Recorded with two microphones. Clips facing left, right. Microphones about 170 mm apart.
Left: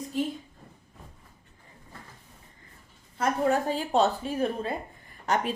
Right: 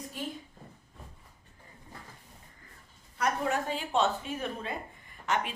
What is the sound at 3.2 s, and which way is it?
A woman's voice, 35° left (ahead or behind).